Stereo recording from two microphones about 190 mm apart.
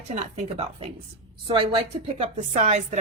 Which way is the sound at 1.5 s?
25° right (ahead or behind).